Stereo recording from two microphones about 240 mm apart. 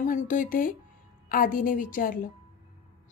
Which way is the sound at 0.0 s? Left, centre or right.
Left.